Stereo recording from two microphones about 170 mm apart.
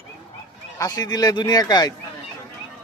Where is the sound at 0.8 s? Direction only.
20° left (ahead or behind).